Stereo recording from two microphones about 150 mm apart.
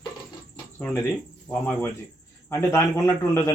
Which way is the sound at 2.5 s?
15° left (ahead or behind).